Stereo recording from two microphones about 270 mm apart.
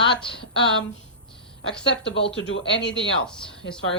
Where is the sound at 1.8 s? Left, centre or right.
Left.